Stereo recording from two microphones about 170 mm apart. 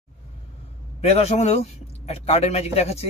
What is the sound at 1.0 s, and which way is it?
A man's voice, 35° left (ahead or behind).